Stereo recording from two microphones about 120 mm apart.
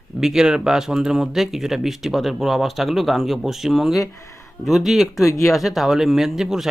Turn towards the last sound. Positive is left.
turn(degrees=-5)  # may be behind; listen again after turning